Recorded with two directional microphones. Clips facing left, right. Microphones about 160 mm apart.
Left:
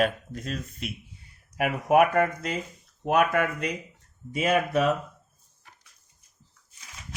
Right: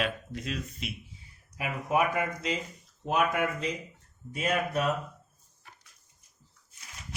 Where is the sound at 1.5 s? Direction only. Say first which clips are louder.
Left 7 dB; 65° left (ahead or behind).